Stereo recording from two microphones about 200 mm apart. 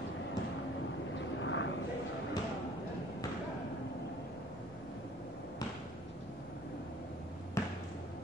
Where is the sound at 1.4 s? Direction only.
70° left (ahead or behind).